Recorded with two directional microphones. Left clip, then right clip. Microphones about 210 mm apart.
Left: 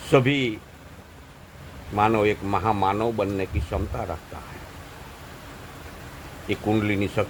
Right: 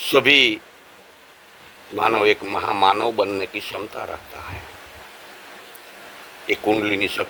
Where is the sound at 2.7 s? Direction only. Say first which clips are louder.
Right 6 dB; 25° right (ahead or behind).